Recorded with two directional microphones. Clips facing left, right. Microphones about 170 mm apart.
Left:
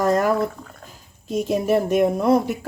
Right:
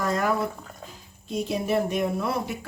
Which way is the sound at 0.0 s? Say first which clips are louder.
Left 7 dB; 45° left (ahead or behind).